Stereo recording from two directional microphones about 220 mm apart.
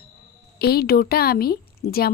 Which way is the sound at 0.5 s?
45° left (ahead or behind).